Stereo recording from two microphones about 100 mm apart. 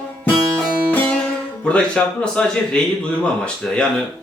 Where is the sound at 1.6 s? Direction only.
10° left (ahead or behind).